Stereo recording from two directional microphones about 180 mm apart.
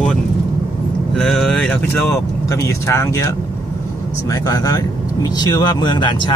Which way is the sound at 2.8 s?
15° left (ahead or behind).